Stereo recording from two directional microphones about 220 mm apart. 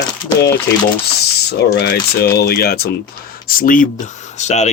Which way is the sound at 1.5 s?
50° left (ahead or behind).